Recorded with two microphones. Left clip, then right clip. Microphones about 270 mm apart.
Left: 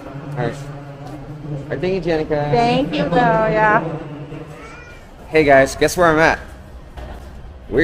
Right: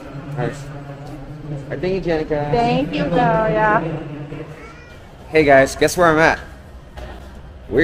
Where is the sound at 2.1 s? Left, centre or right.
Left.